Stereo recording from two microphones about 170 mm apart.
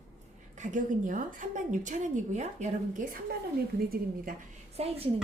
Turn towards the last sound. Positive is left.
turn(degrees=-35)  # may be behind; listen again after turning